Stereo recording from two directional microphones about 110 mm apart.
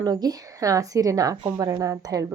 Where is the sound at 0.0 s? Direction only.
35° right (ahead or behind).